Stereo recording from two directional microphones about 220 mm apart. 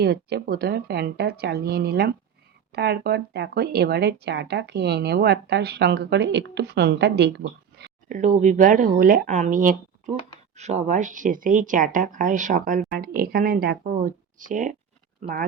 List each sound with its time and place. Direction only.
0.0 s speech: 45° right (ahead or behind)